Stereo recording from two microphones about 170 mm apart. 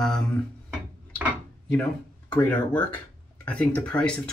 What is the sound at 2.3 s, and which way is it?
Speech, 10° left (ahead or behind).